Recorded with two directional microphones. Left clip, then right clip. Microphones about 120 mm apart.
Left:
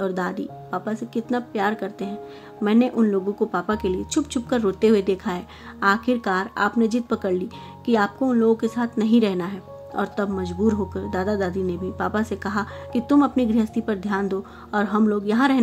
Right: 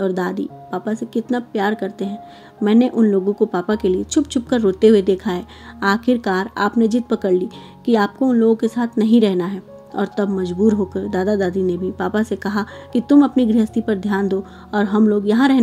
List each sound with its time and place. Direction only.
0.0 s speech: 30° right (ahead or behind)